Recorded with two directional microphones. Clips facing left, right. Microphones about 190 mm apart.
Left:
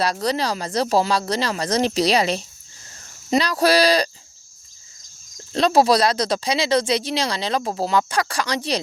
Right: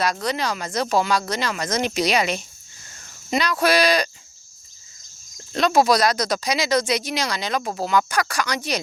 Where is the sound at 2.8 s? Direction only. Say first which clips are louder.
Even; 30° left (ahead or behind).